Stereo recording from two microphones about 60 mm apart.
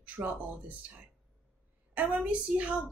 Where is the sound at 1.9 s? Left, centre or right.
Right.